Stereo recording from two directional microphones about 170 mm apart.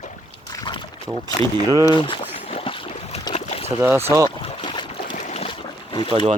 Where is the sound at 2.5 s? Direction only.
35° left (ahead or behind).